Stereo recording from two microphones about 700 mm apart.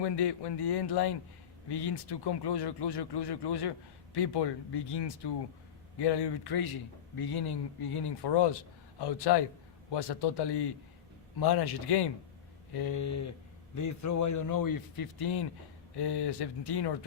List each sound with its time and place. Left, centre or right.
0.0 s speech: left